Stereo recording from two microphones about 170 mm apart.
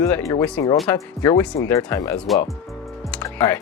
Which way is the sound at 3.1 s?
10° left (ahead or behind).